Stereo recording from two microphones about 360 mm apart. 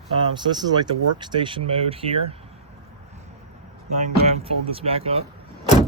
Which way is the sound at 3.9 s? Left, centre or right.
Centre.